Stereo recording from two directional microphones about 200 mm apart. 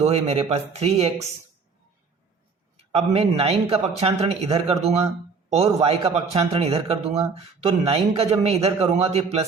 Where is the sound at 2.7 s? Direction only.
30° right (ahead or behind).